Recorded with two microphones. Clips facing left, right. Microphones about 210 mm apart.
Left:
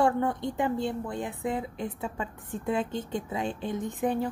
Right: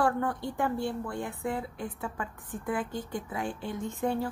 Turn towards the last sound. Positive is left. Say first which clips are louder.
# left 2 dB
turn(degrees=15)  # may be behind; listen again after turning